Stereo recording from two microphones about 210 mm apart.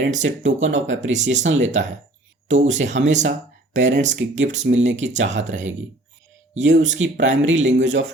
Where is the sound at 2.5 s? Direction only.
35° right (ahead or behind).